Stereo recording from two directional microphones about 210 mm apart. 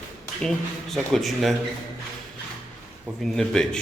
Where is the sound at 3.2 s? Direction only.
5° left (ahead or behind).